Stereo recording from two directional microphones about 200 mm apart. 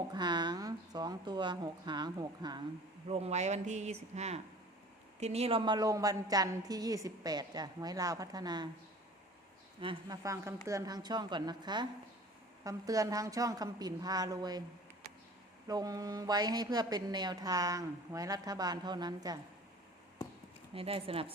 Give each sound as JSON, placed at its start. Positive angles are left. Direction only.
{"t": 0.1, "sound": "a woman's voice", "side_deg": -20}
{"t": 3.1, "sound": "a woman's voice", "side_deg": -30}
{"t": 9.8, "sound": "a woman's voice", "side_deg": -20}
{"t": 15.6, "sound": "a woman's voice", "side_deg": -20}
{"t": 20.7, "sound": "a woman's voice", "side_deg": -30}